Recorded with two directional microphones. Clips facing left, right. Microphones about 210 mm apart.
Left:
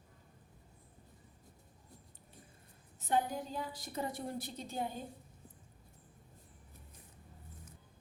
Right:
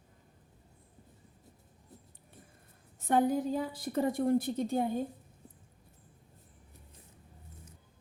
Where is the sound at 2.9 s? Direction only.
55° right (ahead or behind).